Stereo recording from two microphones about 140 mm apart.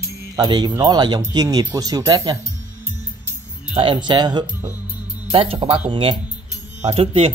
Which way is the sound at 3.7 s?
35° right (ahead or behind).